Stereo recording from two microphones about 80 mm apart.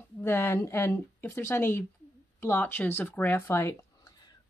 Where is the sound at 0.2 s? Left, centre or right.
Left.